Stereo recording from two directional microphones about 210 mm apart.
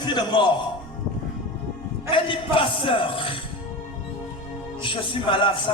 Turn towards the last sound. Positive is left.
turn(degrees=25)  # may be behind; listen again after turning